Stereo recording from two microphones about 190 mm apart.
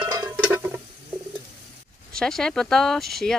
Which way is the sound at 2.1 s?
5° left (ahead or behind).